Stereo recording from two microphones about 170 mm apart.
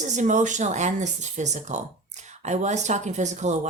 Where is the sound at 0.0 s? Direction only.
45° right (ahead or behind).